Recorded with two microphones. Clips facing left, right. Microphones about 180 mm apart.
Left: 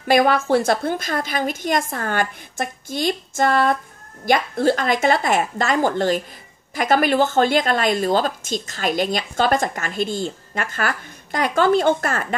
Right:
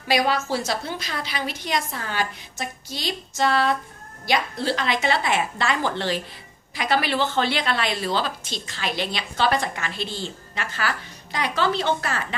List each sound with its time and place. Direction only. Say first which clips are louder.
0.1 s a woman's voice: left 6 dB; 55° left (ahead or behind)